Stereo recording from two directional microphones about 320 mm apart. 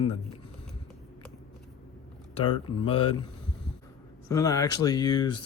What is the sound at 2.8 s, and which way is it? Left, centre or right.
Speech, centre.